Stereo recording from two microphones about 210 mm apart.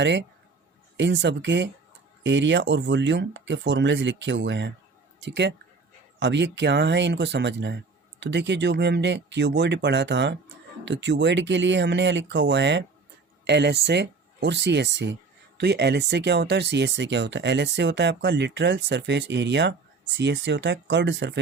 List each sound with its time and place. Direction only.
0.0 s speech: 55° right (ahead or behind)